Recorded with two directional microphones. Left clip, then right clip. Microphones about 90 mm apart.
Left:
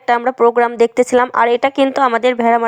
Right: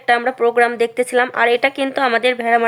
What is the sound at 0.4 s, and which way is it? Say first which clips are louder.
Speech: left 4 dB; 60° left (ahead or behind).